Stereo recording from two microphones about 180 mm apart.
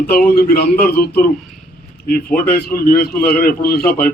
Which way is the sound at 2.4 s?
60° left (ahead or behind).